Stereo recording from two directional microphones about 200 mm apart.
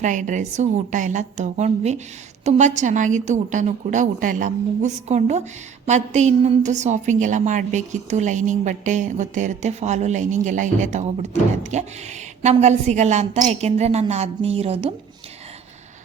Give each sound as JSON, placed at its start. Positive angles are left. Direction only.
{"t": 0.0, "sound": "a woman's voice", "side_deg": -40}